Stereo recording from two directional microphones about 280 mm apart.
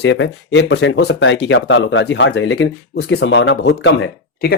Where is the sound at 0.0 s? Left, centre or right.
Left.